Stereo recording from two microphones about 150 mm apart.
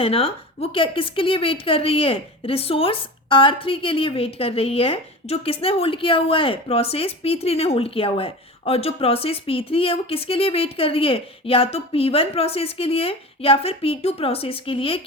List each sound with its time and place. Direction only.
0.0 s a woman's voice: 40° left (ahead or behind)